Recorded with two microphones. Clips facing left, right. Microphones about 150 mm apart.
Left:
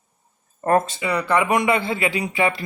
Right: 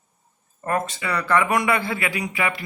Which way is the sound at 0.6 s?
35° left (ahead or behind).